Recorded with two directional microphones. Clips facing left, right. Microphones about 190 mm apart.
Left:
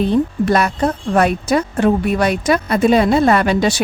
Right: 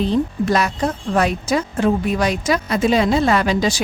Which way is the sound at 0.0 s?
55° left (ahead or behind).